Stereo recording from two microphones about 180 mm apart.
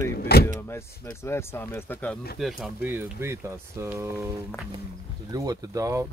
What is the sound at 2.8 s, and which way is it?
Speech, 10° right (ahead or behind).